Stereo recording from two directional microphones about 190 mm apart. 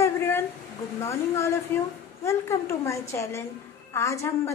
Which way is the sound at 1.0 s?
15° left (ahead or behind).